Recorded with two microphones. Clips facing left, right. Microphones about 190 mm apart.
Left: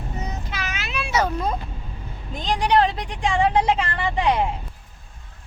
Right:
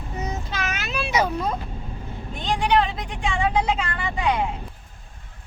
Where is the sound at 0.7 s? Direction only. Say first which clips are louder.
Right 1 dB; 45° right (ahead or behind).